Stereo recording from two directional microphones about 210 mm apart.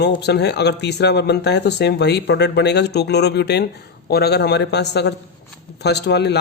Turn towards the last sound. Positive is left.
turn(degrees=55)  # may be behind; listen again after turning